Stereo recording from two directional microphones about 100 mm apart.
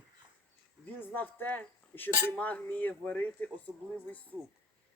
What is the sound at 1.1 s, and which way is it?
Speech, 15° left (ahead or behind).